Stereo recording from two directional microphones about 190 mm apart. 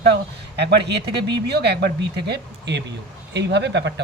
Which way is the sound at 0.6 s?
60° right (ahead or behind).